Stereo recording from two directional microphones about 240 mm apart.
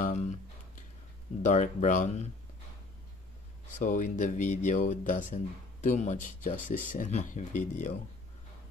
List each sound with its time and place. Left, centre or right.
0.0 s a sound: left
1.4 s speech: left
3.7 s speech: left